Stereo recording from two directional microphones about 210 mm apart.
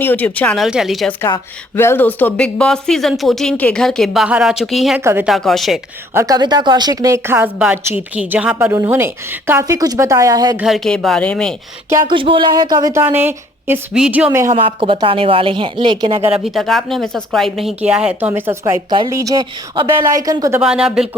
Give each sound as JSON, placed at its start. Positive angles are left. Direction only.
{"t": 0.0, "sound": "a woman's voice", "side_deg": 10}
{"t": 1.2, "sound": "a woman's voice", "side_deg": 10}
{"t": 6.1, "sound": "a woman's voice", "side_deg": -15}
{"t": 10.6, "sound": "a woman's voice", "side_deg": 0}
{"t": 11.9, "sound": "a woman's voice", "side_deg": -20}
{"t": 14.5, "sound": "speech", "side_deg": -25}
{"t": 16.4, "sound": "a woman's voice", "side_deg": 0}
{"t": 20.6, "sound": "a woman's voice", "side_deg": -5}